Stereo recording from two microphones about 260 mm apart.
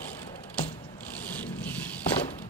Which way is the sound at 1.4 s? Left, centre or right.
Centre.